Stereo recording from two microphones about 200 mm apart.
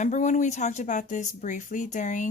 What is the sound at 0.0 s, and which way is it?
Speech, 35° left (ahead or behind).